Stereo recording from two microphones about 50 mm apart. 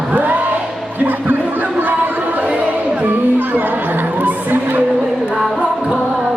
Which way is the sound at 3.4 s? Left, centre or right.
Right.